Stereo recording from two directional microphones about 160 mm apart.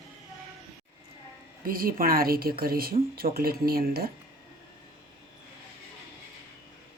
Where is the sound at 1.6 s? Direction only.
65° right (ahead or behind).